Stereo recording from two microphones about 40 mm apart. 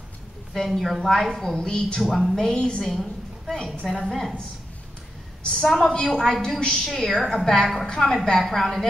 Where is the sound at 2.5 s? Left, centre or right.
Left.